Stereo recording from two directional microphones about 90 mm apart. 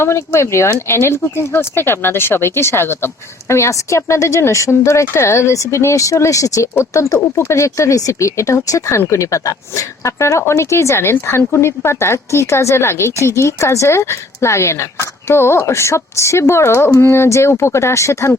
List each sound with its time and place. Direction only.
0.0 s speech: 30° left (ahead or behind)